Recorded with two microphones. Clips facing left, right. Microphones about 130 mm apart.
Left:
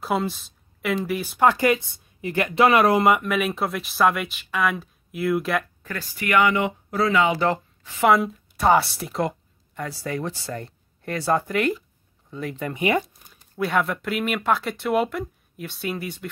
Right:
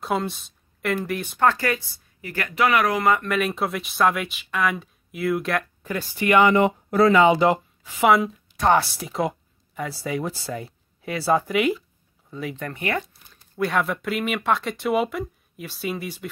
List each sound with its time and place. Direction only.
0.0 s speech: centre (ahead or behind)
1.4 s speech: 15° left (ahead or behind)
3.3 s speech: centre (ahead or behind)
5.8 s a sound: 15° right (ahead or behind)
6.1 s speech: 25° right (ahead or behind); by 7.2 s 50° right (ahead or behind)
7.4 s a woman's voice: 10° right (ahead or behind)
8.1 s speech: centre (ahead or behind)
12.7 s speech: 15° left (ahead or behind)
13.3 s speech: centre (ahead or behind)